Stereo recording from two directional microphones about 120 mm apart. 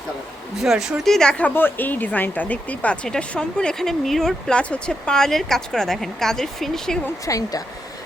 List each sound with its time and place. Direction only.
0.6 s a woman's voice: 5° right (ahead or behind)
7.3 s speech: 30° left (ahead or behind)